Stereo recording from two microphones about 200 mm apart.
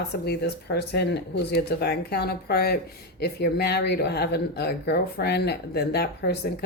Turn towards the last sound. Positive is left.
turn(degrees=55)  # may be behind; listen again after turning